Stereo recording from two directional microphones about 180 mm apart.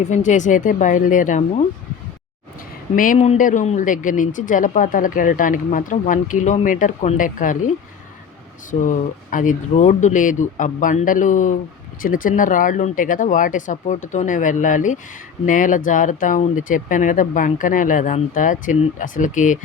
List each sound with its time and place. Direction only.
0.0 s speech: 40° left (ahead or behind)
2.9 s speech: 50° left (ahead or behind)
8.9 s speech: 45° left (ahead or behind)